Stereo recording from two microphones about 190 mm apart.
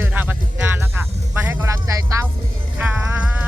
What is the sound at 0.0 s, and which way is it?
Music, 10° right (ahead or behind).